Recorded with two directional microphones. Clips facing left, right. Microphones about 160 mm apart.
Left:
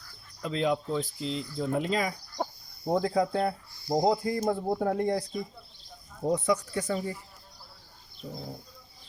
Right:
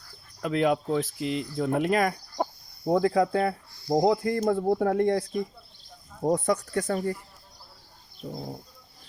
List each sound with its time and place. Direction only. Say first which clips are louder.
0.4 s speech: right 4 dB; 65° right (ahead or behind)
6.3 s speech: right 1 dB; 55° right (ahead or behind)